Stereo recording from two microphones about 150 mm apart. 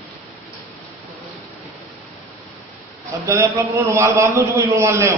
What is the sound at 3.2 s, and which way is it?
A man's voice, 15° right (ahead or behind).